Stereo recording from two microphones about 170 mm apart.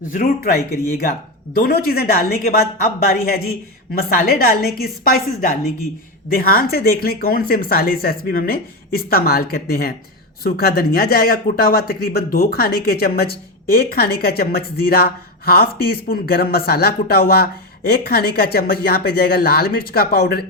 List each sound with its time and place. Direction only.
0.1 s speech: 60° left (ahead or behind)